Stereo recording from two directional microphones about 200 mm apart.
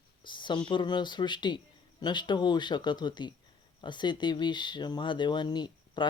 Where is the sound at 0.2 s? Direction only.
25° left (ahead or behind).